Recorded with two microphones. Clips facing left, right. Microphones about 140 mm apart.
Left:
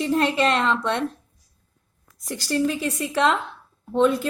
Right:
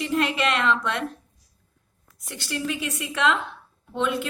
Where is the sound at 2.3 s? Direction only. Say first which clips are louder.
Left 7 dB; 35° left (ahead or behind).